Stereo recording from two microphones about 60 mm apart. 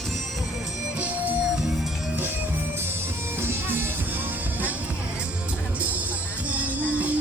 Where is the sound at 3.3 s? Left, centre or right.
Right.